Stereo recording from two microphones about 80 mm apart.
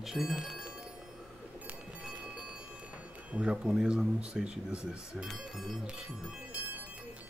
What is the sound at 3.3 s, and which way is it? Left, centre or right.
Speech, centre.